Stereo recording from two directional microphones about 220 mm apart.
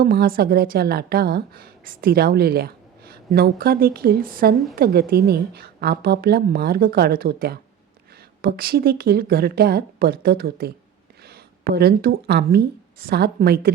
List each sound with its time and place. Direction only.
0.0 s a woman's voice: 45° right (ahead or behind)